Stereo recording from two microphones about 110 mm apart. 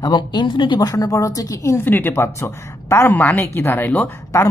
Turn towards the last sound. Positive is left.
turn(degrees=30)  # may be behind; listen again after turning